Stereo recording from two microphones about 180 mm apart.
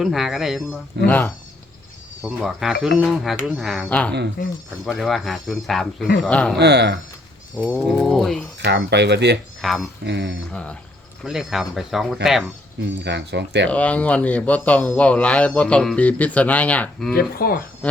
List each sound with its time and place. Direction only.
0.0 s speech: centre (ahead or behind)
1.0 s speech: 10° left (ahead or behind)
2.2 s speech: 5° right (ahead or behind)
6.6 s speech: 70° right (ahead or behind)
7.5 s speech: 5° left (ahead or behind)
8.5 s speech: 70° right (ahead or behind)
9.6 s speech: centre (ahead or behind)
10.0 s speech: 75° right (ahead or behind)
10.5 s speech: 5° left (ahead or behind)
12.8 s speech: 75° right (ahead or behind)
13.7 s speech: 10° left (ahead or behind)
17.2 s speech: 55° left (ahead or behind)